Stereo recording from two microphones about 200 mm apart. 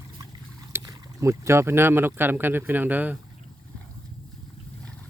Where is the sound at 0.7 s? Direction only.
15° right (ahead or behind).